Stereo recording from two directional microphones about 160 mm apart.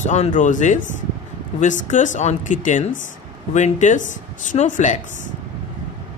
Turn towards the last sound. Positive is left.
turn(degrees=50)  # may be behind; listen again after turning